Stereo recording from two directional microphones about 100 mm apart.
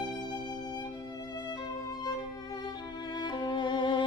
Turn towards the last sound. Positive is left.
turn(degrees=50)  # may be behind; listen again after turning